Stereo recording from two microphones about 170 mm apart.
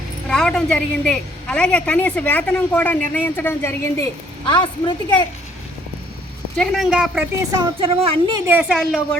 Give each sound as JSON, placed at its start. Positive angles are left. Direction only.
{"t": 0.3, "sound": "a woman's voice", "side_deg": 5}
{"t": 4.4, "sound": "a woman's voice", "side_deg": 30}
{"t": 6.6, "sound": "a woman's voice", "side_deg": -5}
{"t": 7.6, "sound": "a woman's voice", "side_deg": -30}
{"t": 8.4, "sound": "a woman's voice", "side_deg": -5}